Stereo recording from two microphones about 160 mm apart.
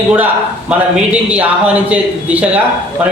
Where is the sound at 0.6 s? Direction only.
5° right (ahead or behind).